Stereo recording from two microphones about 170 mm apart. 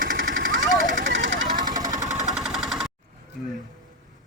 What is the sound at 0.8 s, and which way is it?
Vehicle, 50° right (ahead or behind).